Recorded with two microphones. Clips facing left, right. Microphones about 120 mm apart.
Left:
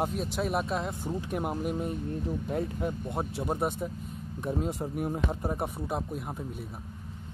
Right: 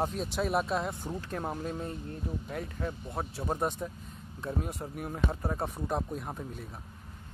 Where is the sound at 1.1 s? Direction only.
15° left (ahead or behind).